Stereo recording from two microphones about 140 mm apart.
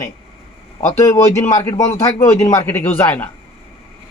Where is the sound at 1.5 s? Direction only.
25° left (ahead or behind).